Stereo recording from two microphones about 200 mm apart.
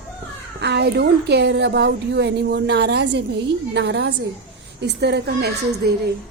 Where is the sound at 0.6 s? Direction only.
55° right (ahead or behind).